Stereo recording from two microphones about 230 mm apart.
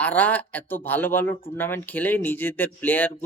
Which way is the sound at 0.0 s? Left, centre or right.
Centre.